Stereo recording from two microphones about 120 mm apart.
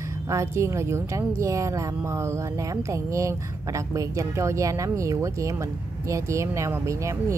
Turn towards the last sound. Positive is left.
turn(degrees=-25)  # may be behind; listen again after turning